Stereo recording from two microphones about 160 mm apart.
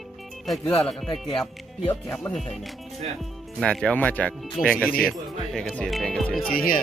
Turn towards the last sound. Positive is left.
turn(degrees=65)  # may be behind; listen again after turning